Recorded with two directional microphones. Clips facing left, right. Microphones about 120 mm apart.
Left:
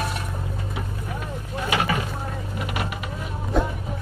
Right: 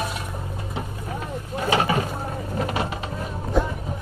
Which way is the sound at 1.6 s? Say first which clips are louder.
Right 3 dB; 30° right (ahead or behind).